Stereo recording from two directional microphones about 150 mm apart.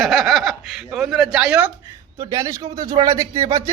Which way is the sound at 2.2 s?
20° right (ahead or behind).